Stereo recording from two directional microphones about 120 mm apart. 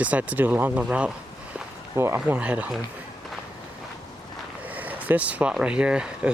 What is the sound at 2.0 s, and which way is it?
Speech, 20° right (ahead or behind).